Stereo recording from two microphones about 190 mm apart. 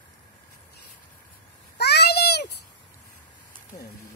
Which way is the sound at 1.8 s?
60° left (ahead or behind).